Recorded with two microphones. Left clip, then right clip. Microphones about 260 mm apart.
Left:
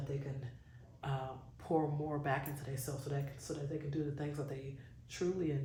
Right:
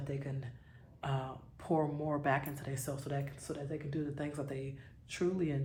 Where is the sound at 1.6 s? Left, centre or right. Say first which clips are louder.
Right 2 dB; right.